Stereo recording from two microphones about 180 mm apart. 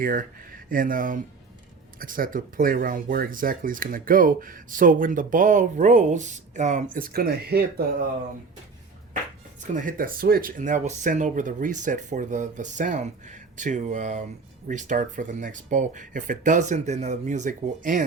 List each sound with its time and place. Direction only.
0.0 s speech: 50° right (ahead or behind)
6.9 s speech: 55° right (ahead or behind)
9.6 s speech: 45° right (ahead or behind)